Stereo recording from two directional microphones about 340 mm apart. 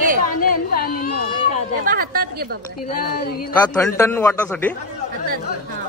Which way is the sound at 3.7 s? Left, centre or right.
Centre.